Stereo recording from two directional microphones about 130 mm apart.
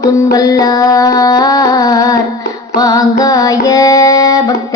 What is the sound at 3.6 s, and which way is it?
Music, 30° left (ahead or behind).